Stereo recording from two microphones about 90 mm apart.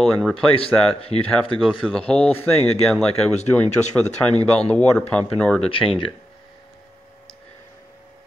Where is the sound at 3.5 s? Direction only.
15° left (ahead or behind).